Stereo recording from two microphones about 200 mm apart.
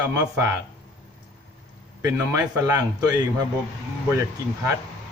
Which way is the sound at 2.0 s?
15° right (ahead or behind).